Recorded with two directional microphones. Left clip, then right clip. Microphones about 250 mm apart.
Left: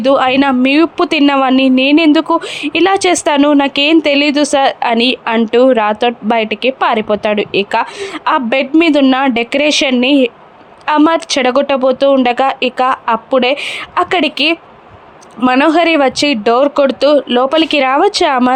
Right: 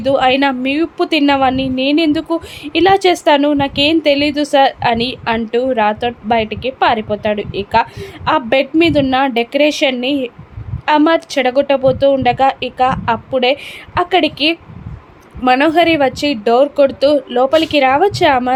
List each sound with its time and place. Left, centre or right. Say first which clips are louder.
0.0 s a woman's voice: left 2 dB; centre